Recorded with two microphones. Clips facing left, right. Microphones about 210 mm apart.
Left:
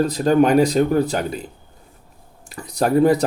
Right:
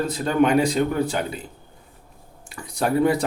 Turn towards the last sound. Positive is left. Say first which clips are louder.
# left 4 dB
turn(degrees=40)  # may be behind; listen again after turning